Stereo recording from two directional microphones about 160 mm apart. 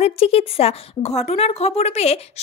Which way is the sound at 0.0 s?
40° left (ahead or behind).